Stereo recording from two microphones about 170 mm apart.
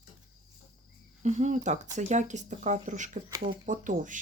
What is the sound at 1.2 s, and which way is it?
Speech, 45° right (ahead or behind).